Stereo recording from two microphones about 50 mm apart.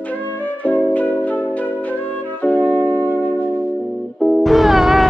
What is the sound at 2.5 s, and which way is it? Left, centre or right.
Music, right.